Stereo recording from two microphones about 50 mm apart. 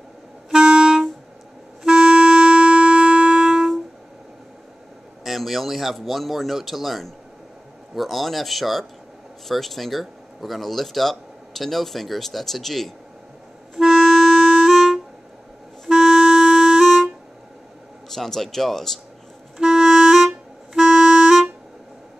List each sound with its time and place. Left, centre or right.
0.5 s music: centre
5.2 s speech: centre
13.7 s clarinet: centre
18.1 s speech: centre
19.6 s clarinet: centre